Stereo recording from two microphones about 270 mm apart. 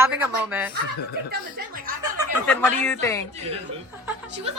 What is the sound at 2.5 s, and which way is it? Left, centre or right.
Speech, centre.